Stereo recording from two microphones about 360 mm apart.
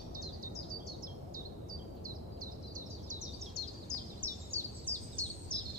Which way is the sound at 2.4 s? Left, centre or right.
Right.